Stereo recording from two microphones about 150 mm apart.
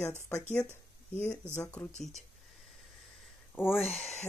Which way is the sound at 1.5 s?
15° left (ahead or behind).